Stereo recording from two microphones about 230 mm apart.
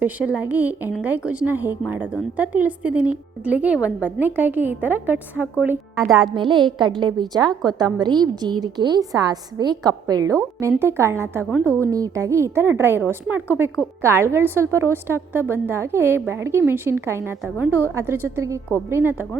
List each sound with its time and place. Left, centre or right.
0.0 s a woman's voice: centre
6.3 s a woman's voice: right